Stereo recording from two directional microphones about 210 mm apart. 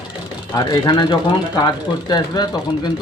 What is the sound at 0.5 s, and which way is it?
Speech, 20° left (ahead or behind).